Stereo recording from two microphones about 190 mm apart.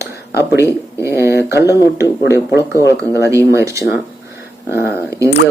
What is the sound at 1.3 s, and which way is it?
Speech, 60° left (ahead or behind).